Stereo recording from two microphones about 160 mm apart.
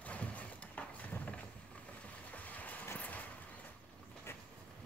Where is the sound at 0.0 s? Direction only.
10° left (ahead or behind).